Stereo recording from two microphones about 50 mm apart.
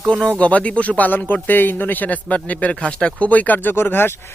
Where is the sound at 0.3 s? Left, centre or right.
Left.